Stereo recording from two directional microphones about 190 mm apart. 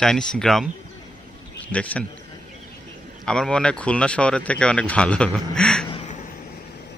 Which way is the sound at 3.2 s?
5° left (ahead or behind).